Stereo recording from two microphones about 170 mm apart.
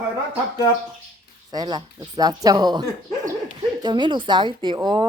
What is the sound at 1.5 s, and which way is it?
Speech, 25° right (ahead or behind).